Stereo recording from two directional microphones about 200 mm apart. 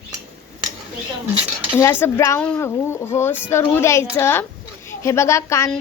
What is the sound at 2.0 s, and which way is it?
Speech, 15° left (ahead or behind).